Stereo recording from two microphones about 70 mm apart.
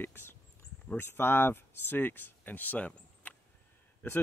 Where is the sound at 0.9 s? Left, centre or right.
Left.